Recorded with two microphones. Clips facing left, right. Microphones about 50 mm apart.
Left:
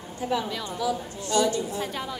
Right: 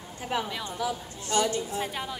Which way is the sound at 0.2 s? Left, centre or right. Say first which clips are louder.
Left 3 dB; right.